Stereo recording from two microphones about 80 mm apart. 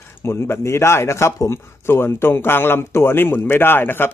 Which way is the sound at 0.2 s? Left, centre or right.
Left.